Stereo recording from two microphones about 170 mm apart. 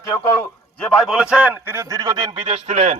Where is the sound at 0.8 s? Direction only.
Centre (ahead or behind).